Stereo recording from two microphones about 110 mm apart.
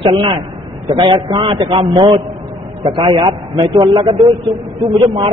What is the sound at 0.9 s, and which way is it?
A man's voice, 45° right (ahead or behind).